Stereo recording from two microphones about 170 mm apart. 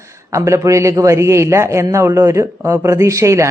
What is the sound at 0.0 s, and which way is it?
Speech, 15° right (ahead or behind).